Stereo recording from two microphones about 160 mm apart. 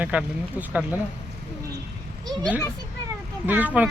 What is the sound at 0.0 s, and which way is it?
Speech, 10° right (ahead or behind).